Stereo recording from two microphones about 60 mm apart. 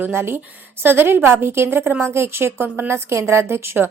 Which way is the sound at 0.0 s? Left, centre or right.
Right.